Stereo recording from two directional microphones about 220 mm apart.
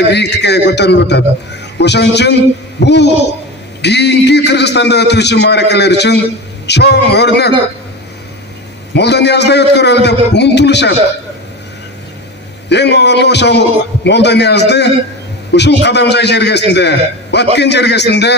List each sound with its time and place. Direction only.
0.1 s a man's voice: 50° left (ahead or behind)
8.9 s a man's voice: 50° left (ahead or behind)
12.6 s a man's voice: 50° left (ahead or behind)